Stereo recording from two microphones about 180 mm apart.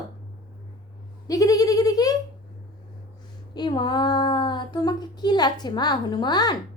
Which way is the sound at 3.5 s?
25° left (ahead or behind).